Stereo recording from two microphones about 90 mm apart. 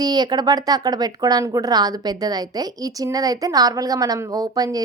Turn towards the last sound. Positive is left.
turn(degrees=-45)  # may be behind; listen again after turning